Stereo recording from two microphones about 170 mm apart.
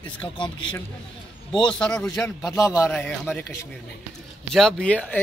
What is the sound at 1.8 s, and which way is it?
Speech, 5° left (ahead or behind).